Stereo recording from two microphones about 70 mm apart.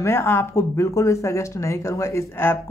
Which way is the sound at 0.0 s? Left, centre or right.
Left.